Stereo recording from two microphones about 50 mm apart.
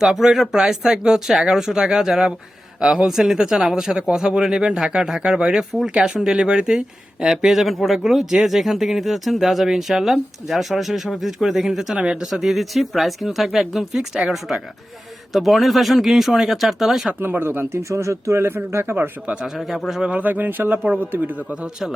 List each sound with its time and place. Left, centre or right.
0.0 s speech: centre
11.9 s speech: centre
12.3 s speech: centre
17.2 s speech: right
17.8 s speech: right
18.4 s speech: right
19.5 s speech: centre
20.1 s speech: right